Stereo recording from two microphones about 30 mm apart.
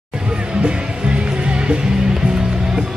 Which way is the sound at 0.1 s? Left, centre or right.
Right.